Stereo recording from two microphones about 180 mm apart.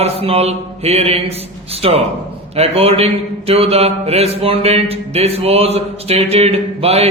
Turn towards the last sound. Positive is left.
turn(degrees=-35)  # may be behind; listen again after turning